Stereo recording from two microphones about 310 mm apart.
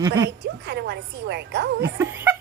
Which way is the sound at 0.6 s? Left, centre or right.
Right.